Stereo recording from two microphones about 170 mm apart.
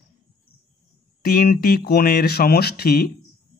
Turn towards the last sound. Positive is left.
turn(degrees=65)  # may be behind; listen again after turning